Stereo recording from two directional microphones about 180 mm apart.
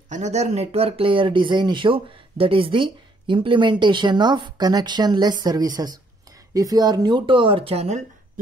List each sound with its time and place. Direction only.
0.1 s speech: 40° right (ahead or behind)